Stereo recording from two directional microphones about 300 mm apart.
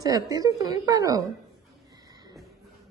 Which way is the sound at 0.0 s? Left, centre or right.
Centre.